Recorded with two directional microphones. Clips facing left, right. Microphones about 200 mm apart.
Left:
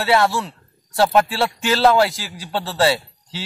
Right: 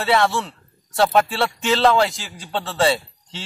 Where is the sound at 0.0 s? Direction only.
5° left (ahead or behind).